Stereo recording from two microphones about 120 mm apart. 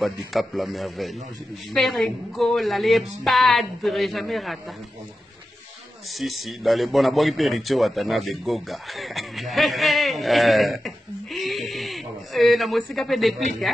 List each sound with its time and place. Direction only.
0.0 s a man's voice: centre (ahead or behind)
6.1 s a man's voice: centre (ahead or behind)